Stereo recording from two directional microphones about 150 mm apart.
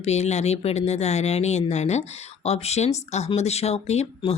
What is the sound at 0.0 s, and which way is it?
Speech, 45° left (ahead or behind).